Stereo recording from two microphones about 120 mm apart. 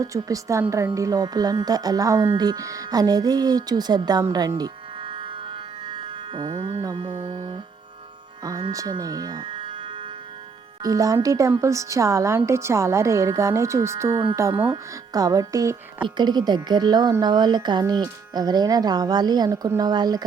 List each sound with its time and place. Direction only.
0.0 s a woman's voice: 30° right (ahead or behind)
5.0 s music: 45° right (ahead or behind)
8.7 s speech: 30° right (ahead or behind)
9.4 s music: 45° right (ahead or behind)
10.8 s a woman's voice: 30° right (ahead or behind)
14.1 s speech: 45° right (ahead or behind)
14.3 s a woman's voice: 25° right (ahead or behind)
16.0 s speech: 40° right (ahead or behind)